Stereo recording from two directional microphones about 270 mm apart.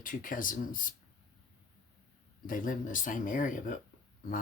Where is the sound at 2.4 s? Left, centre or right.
Left.